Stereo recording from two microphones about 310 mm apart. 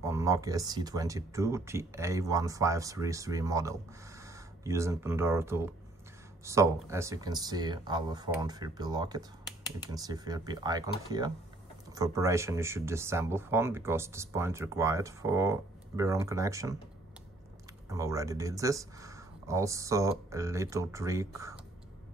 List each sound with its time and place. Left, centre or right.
0.0 s speech: centre
17.8 s speech: centre